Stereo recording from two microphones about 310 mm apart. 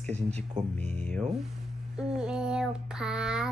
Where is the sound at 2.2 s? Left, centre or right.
Centre.